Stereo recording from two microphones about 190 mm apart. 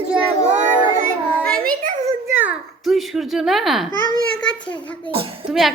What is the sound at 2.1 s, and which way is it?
A child's voice, 10° right (ahead or behind).